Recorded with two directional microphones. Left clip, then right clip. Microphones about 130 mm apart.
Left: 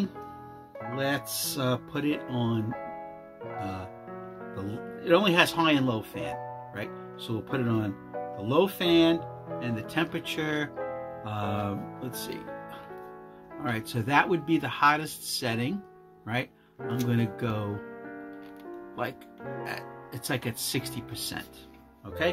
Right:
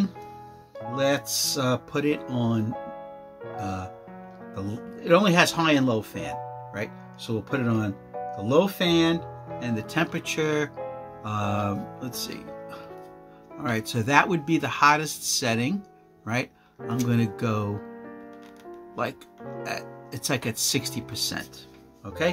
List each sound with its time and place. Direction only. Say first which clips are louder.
0.9 s speech: right 6 dB; 65° right (ahead or behind)
16.3 s music: right 3 dB; 65° right (ahead or behind)
17.1 s speech: right 6 dB; 65° right (ahead or behind)
19.6 s speech: right 7 dB; 60° right (ahead or behind)